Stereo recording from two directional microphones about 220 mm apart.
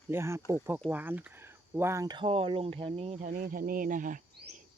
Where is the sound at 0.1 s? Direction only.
10° right (ahead or behind); by 3.2 s 30° right (ahead or behind).